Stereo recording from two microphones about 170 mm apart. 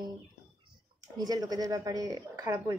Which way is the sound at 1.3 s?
20° right (ahead or behind).